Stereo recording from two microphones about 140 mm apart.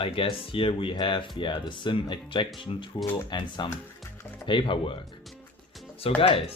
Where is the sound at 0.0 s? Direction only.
40° left (ahead or behind).